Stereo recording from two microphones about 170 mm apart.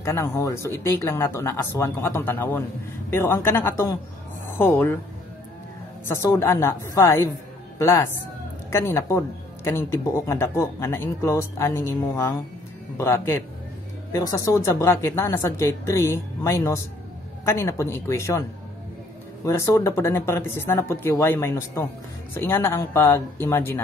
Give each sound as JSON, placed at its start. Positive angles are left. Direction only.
{"t": 0.0, "sound": "speech", "side_deg": 15}
{"t": 6.0, "sound": "speech", "side_deg": 15}
{"t": 19.4, "sound": "speech", "side_deg": 15}